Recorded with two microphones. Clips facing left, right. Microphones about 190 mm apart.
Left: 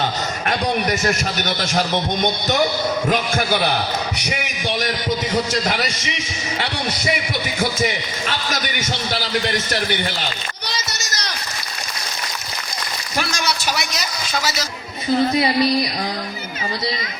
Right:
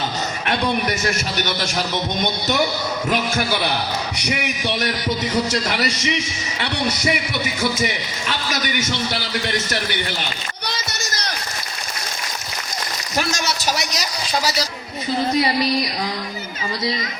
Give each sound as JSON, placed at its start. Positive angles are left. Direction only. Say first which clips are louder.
{"t": 13.1, "sound": "a man's voice", "louder": "right 1 dB", "side_deg": -40}